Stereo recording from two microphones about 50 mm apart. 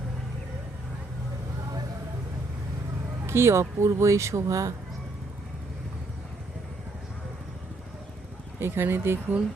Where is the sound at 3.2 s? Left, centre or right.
Right.